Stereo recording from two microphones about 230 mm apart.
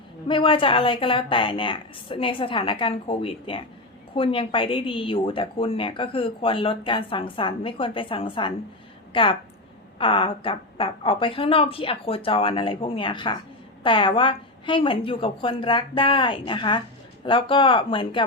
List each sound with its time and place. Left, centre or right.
0.3 s a woman's voice: left